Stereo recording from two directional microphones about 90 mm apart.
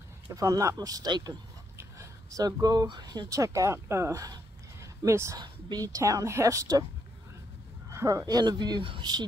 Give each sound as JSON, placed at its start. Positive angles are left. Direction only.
{"t": 0.3, "sound": "speech", "side_deg": -40}
{"t": 1.8, "sound": "speech", "side_deg": -35}
{"t": 5.4, "sound": "speech", "side_deg": -55}
{"t": 5.9, "sound": "a woman's voice", "side_deg": -40}
{"t": 7.9, "sound": "speech", "side_deg": -35}
{"t": 8.3, "sound": "speech", "side_deg": -50}